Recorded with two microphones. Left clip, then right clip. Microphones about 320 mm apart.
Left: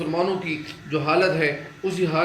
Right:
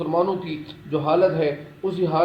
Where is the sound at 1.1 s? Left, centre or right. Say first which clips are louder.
Right 1 dB; centre.